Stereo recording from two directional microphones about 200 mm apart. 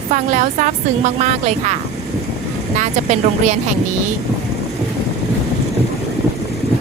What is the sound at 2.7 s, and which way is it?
Speech, 35° right (ahead or behind).